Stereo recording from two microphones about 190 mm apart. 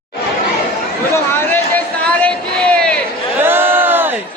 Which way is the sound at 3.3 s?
10° right (ahead or behind).